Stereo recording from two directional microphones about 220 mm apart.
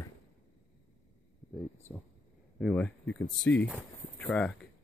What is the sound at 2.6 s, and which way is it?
Speech, 5° left (ahead or behind).